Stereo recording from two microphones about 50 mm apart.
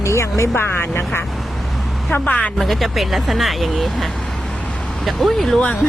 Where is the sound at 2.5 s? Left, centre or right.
Centre.